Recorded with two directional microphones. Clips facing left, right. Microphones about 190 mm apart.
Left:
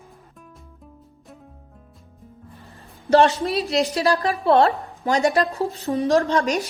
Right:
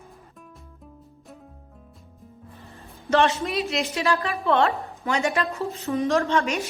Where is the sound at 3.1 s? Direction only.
35° left (ahead or behind).